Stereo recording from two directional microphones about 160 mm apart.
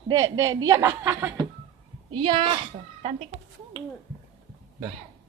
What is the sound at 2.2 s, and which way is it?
Speech, 30° right (ahead or behind).